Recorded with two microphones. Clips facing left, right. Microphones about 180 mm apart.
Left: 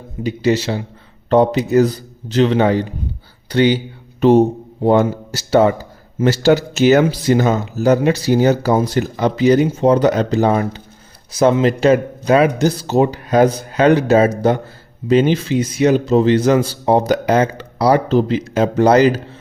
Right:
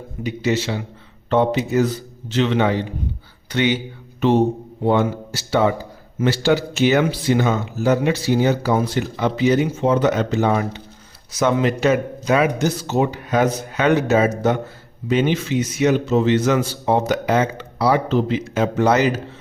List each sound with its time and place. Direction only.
0.2 s speech: 35° left (ahead or behind)